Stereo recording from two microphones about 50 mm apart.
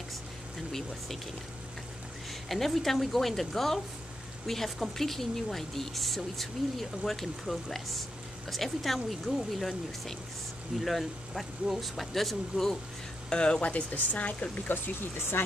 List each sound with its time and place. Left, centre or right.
0.7 s speech: centre
2.4 s speech: centre
13.3 s speech: centre
14.7 s speech: left